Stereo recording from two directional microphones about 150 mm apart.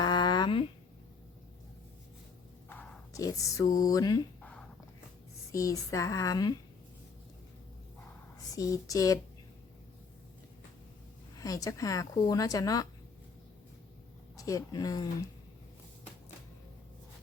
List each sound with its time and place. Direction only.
0.0 s a sound: 30° left (ahead or behind)
2.6 s a sound: 10° left (ahead or behind)
3.1 s speech: 25° left (ahead or behind)
5.5 s speech: 20° left (ahead or behind)
8.5 s speech: 20° left (ahead or behind)
11.3 s speech: 20° left (ahead or behind)
14.3 s speech: 20° left (ahead or behind)